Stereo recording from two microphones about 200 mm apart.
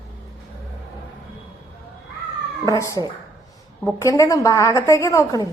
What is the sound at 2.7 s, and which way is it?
A woman's voice, 15° left (ahead or behind).